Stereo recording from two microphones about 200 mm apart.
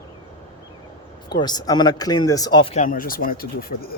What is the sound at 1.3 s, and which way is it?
Speech, 20° left (ahead or behind).